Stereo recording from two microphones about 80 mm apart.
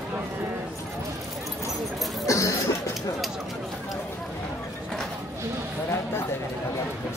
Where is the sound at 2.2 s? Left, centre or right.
Left.